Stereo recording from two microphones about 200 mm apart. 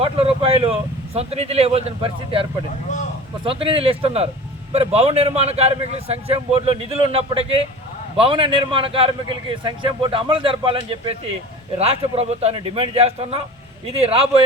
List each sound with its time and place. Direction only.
0.0 s a man's voice: 30° right (ahead or behind)